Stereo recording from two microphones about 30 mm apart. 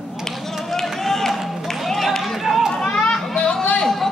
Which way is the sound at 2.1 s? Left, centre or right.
Centre.